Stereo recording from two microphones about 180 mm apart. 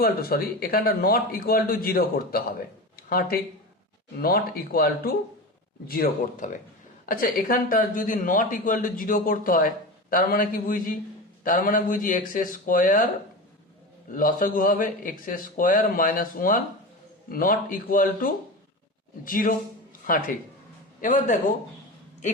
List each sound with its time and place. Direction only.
0.0 s speech: 60° left (ahead or behind)
14.1 s speech: 50° left (ahead or behind)